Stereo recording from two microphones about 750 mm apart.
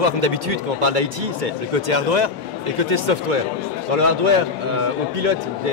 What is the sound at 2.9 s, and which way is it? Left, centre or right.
A man's voice, right.